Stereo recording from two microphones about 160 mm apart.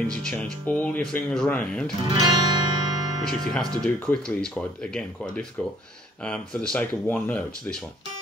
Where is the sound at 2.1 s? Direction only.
25° right (ahead or behind).